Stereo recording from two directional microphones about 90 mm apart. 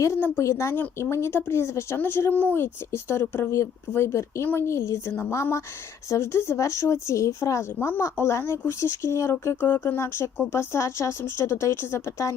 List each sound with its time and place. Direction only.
0.0 s speech: 30° left (ahead or behind)